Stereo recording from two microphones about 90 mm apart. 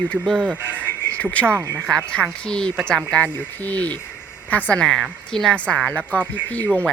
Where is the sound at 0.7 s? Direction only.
15° left (ahead or behind).